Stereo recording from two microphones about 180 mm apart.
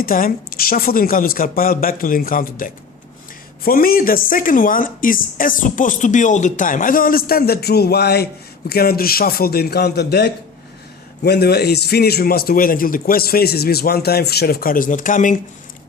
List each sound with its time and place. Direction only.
0.0 s a woman's voice: 55° left (ahead or behind)